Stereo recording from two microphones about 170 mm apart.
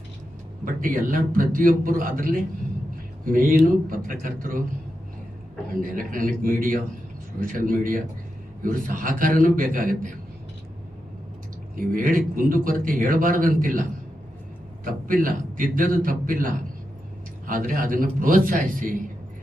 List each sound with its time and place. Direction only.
0.6 s a man's voice: 55° right (ahead or behind)
5.8 s a man's voice: 55° right (ahead or behind)
11.8 s a man's voice: 55° right (ahead or behind)
14.8 s a man's voice: 55° right (ahead or behind)